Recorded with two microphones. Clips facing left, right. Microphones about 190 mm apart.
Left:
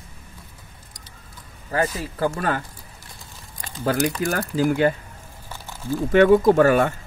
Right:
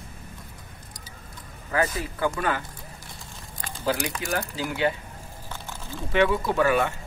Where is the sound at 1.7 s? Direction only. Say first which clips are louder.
Left 2 dB; 35° left (ahead or behind).